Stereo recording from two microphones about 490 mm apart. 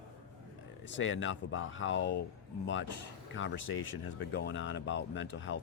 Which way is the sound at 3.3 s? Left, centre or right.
Left.